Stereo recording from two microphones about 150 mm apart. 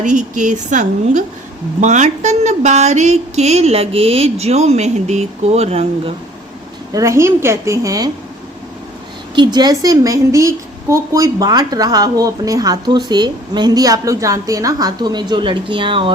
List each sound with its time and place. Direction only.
0.0 s a woman's voice: 55° right (ahead or behind)
6.9 s a woman's voice: 20° right (ahead or behind)
9.3 s a woman's voice: 30° right (ahead or behind)